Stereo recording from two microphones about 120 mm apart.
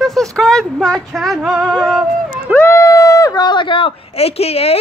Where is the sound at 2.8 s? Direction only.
25° left (ahead or behind); by 4.7 s 55° left (ahead or behind).